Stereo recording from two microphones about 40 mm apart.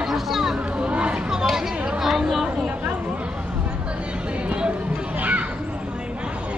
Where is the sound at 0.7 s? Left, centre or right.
Right.